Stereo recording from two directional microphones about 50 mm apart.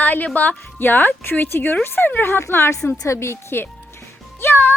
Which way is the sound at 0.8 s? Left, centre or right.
Left.